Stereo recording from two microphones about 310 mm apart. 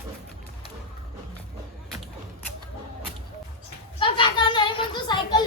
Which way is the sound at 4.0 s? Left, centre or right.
Centre.